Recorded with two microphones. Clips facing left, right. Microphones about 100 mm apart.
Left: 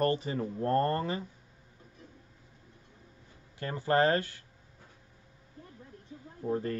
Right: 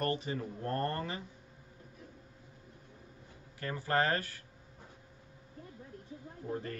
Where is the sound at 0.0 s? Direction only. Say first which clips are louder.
Left 5 dB; 35° left (ahead or behind).